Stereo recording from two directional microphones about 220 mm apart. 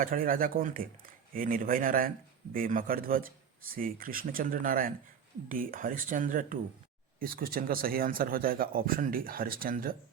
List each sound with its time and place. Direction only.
0.0 s speech: 40° right (ahead or behind)